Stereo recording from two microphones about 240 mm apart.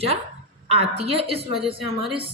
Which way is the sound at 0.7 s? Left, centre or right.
Right.